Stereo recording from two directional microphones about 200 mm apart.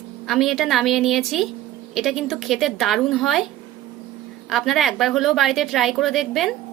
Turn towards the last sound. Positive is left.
turn(degrees=0)  # may be behind; listen again after turning